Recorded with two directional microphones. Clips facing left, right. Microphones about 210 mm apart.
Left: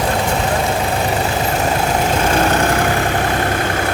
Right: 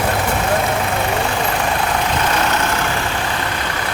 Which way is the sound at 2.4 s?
50° left (ahead or behind).